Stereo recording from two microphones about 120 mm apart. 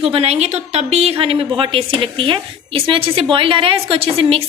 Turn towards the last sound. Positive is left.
turn(degrees=-50)  # may be behind; listen again after turning